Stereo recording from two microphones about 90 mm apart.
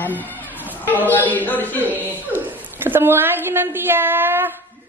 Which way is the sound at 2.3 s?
20° right (ahead or behind).